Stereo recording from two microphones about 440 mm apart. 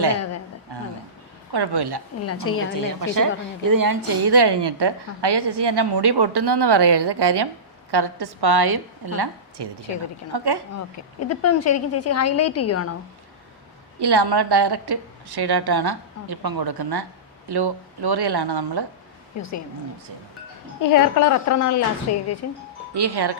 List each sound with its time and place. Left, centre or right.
0.7 s a sound: right
1.5 s a woman's voice: right
2.2 s a woman's voice: left
2.8 s a woman's voice: right
10.8 s speech: left
14.0 s a woman's voice: right
19.4 s speech: left
20.9 s speech: left
23.0 s a woman's voice: right